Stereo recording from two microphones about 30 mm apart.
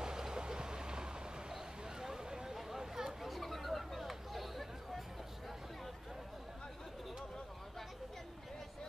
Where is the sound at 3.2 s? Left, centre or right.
Centre.